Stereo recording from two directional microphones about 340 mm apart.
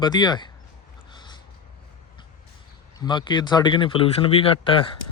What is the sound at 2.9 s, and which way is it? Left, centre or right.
Speech, centre.